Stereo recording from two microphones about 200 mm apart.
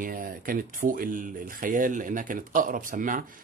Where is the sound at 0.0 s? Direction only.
45° right (ahead or behind).